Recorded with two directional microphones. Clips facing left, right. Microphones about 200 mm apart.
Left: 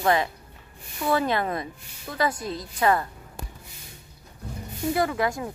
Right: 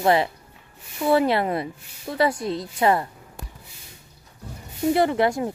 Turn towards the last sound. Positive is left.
turn(degrees=-30)  # may be behind; listen again after turning